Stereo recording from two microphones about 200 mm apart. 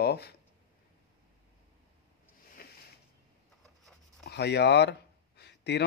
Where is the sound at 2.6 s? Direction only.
50° left (ahead or behind).